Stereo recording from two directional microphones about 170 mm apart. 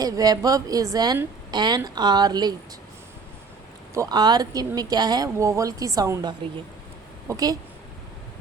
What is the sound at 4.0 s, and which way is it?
A woman's voice, 25° right (ahead or behind).